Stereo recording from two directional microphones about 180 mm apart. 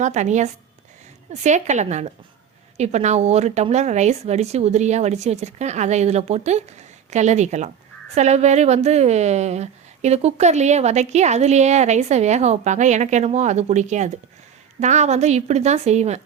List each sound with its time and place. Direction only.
0.0 s a woman's voice: 40° right (ahead or behind)